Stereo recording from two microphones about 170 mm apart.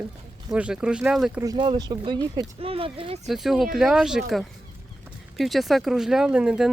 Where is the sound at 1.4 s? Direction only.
25° right (ahead or behind).